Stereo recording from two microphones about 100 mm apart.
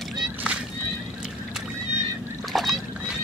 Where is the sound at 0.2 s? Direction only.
10° right (ahead or behind).